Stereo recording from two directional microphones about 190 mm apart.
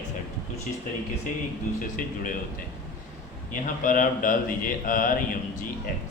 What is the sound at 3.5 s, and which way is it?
A man's voice, 45° left (ahead or behind).